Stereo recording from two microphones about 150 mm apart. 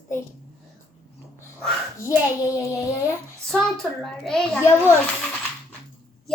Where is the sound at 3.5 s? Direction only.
Centre (ahead or behind).